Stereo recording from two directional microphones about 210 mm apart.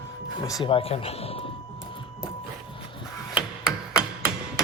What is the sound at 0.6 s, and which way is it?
Speech, 25° left (ahead or behind).